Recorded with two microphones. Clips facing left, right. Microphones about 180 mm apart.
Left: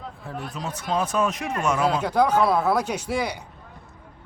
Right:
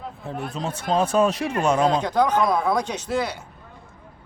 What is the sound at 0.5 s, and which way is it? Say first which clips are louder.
Speech: right 3 dB; 30° right (ahead or behind).